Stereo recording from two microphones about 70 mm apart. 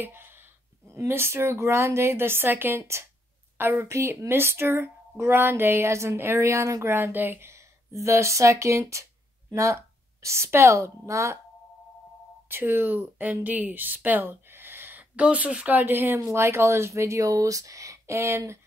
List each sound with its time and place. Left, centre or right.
0.0 s a sound: right
0.9 s a woman's voice: right
12.4 s speech: right
15.1 s speech: centre; by 18.6 s right